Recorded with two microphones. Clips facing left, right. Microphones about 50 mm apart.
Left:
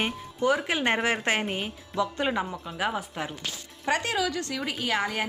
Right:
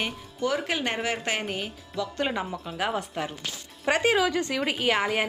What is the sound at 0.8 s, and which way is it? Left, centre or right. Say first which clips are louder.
Speech: left 3 dB; left.